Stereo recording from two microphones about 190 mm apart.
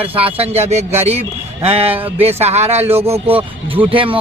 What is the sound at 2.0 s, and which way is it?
Speech, 10° right (ahead or behind).